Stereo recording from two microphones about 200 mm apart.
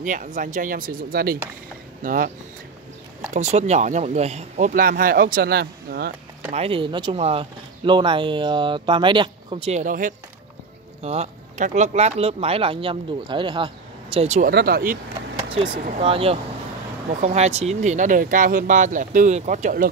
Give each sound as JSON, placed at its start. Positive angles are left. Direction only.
{"t": 0.0, "sound": "speech", "side_deg": -40}
{"t": 6.5, "sound": "speech", "side_deg": -30}
{"t": 11.0, "sound": "speech", "side_deg": -30}
{"t": 14.5, "sound": "speech", "side_deg": -50}
{"t": 15.5, "sound": "speech", "side_deg": -25}